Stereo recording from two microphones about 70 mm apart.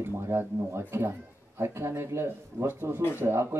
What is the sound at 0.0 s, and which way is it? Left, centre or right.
A man's voice, right.